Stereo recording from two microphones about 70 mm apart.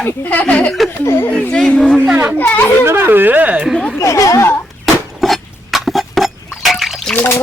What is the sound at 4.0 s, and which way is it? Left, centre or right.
Speech, left.